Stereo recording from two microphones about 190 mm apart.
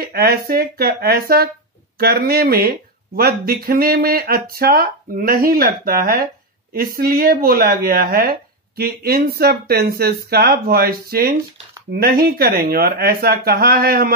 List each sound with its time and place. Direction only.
0.0 s speech: 55° right (ahead or behind)